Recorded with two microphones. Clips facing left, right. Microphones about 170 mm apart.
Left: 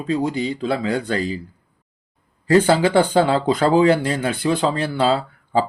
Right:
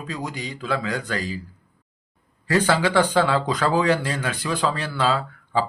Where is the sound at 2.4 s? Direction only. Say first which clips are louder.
Left 5 dB; 30° left (ahead or behind).